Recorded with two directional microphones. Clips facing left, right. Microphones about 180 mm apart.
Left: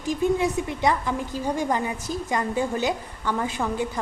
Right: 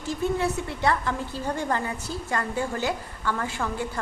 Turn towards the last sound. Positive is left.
turn(degrees=20)  # may be behind; listen again after turning